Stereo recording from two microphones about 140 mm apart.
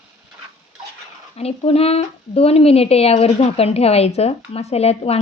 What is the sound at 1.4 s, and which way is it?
Speech, 45° left (ahead or behind).